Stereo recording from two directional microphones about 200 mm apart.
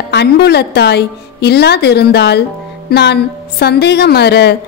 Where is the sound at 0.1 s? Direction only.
55° left (ahead or behind).